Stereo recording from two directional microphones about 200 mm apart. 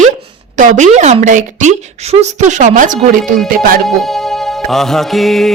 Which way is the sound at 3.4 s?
45° right (ahead or behind).